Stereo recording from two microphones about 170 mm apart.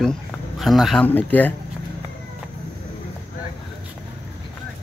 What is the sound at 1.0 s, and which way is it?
Speech, 10° left (ahead or behind).